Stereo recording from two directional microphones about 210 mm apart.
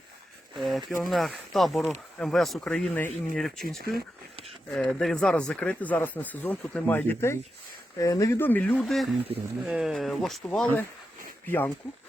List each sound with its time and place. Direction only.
0.5 s speech: centre (ahead or behind)
9.3 s speech: 25° right (ahead or behind)
9.6 s speech: centre (ahead or behind)